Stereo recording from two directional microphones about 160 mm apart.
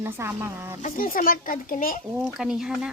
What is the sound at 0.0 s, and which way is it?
Speech, 15° right (ahead or behind).